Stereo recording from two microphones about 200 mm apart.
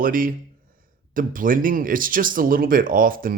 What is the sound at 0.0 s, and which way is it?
Speech, 45° right (ahead or behind).